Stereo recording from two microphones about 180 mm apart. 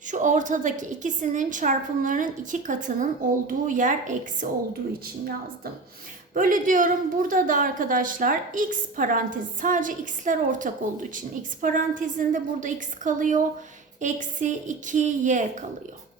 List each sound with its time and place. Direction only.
0.1 s a woman's voice: 45° right (ahead or behind)
6.3 s a woman's voice: 50° right (ahead or behind)